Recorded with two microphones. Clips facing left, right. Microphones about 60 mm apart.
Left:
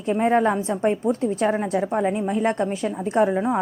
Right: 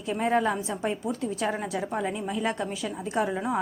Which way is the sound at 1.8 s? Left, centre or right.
Left.